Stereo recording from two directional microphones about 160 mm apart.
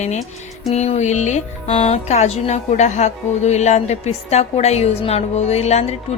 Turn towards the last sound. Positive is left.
turn(degrees=40)  # may be behind; listen again after turning